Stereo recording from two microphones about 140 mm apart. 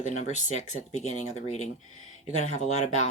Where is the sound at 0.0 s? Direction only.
55° left (ahead or behind).